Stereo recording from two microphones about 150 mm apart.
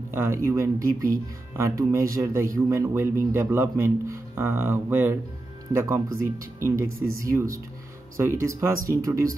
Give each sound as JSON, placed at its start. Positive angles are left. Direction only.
{"t": 0.1, "sound": "a man's voice", "side_deg": -15}